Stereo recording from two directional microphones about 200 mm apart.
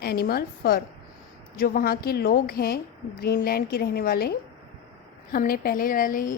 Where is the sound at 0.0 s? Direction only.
50° left (ahead or behind).